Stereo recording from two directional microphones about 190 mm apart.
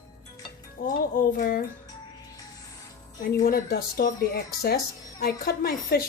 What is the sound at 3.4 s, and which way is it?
Speech, 50° left (ahead or behind).